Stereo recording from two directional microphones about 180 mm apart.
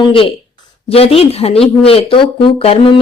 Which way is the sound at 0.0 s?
30° left (ahead or behind).